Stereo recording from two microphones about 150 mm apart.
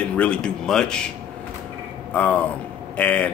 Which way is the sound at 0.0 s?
10° left (ahead or behind).